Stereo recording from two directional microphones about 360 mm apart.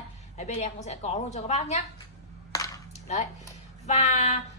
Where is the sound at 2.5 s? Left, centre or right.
Centre.